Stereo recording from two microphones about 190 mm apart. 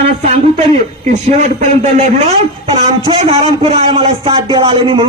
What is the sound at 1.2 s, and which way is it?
A man's voice, 40° right (ahead or behind).